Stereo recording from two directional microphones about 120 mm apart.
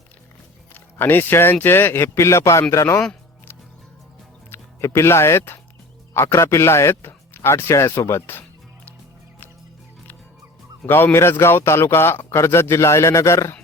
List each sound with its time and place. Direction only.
0.7 s speech: 15° left (ahead or behind)
4.5 s speech: 20° left (ahead or behind)
10.8 s speech: 15° left (ahead or behind)